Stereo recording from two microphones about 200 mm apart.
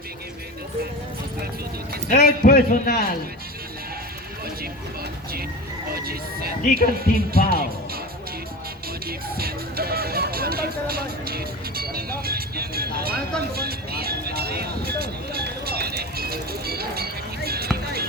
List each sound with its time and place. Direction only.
2.0 s a man's voice: 40° left (ahead or behind)
5.9 s music: 50° right (ahead or behind)
9.0 s music: 50° right (ahead or behind)
13.5 s vehicle: 50° right (ahead or behind)